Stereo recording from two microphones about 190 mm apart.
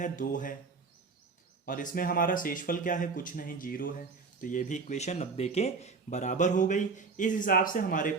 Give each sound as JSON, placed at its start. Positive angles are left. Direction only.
{"t": 0.0, "sound": "speech", "side_deg": 45}
{"t": 1.6, "sound": "speech", "side_deg": 45}